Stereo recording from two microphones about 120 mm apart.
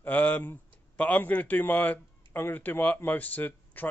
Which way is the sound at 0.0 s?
15° left (ahead or behind).